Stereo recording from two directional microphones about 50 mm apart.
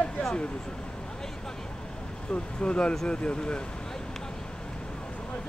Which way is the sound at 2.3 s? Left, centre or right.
Centre.